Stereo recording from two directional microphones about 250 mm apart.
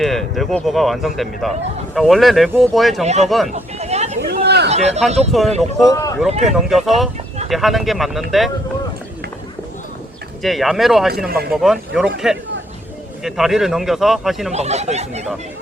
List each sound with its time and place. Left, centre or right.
0.0 s speech: centre
3.0 s speech: right
3.2 s speech: centre
3.5 s a sound: right
4.2 s a sound: right
4.7 s speech: right
5.3 s speech: centre
5.9 s speech: centre
6.4 s speech: centre
10.4 s speech: centre
14.5 s speech: right